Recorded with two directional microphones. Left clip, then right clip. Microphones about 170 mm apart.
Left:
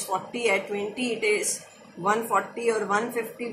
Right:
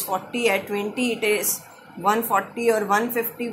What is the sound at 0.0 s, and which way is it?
A woman's voice, 50° right (ahead or behind).